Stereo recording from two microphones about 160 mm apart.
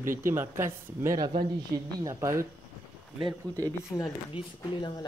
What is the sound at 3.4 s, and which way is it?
Speech, 10° left (ahead or behind).